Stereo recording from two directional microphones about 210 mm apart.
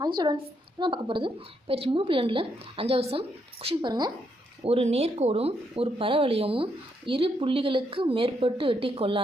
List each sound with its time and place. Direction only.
0.8 s speech: 25° right (ahead or behind)